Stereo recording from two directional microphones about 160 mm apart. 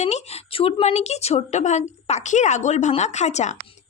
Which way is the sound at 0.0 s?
45° left (ahead or behind).